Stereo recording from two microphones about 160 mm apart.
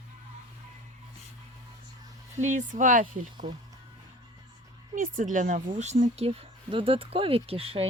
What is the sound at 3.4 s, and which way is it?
Speech, 30° right (ahead or behind).